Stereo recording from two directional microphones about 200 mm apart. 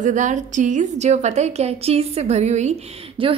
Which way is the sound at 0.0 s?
40° right (ahead or behind).